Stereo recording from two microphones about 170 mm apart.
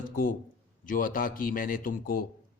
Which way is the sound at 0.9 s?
55° left (ahead or behind).